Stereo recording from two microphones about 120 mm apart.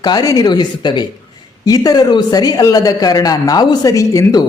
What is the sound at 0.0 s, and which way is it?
A man's voice, 35° left (ahead or behind).